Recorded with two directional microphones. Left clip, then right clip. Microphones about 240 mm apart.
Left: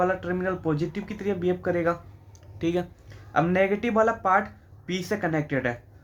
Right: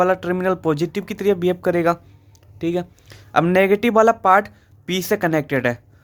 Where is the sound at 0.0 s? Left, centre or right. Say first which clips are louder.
Right 7 dB; right.